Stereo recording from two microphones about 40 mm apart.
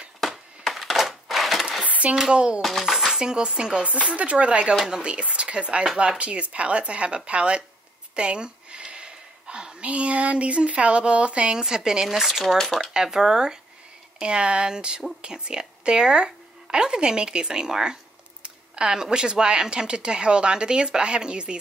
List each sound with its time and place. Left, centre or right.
0.7 s crushing: centre
1.9 s a sound: right
2.3 s speech: right
2.6 s speech: centre
3.1 s speech: centre
3.8 s speech: right
8.2 s a sound: right
9.8 s speech: right
11.5 s speech: centre
12.5 s speech: centre
12.9 s speech: centre
14.2 s speech: right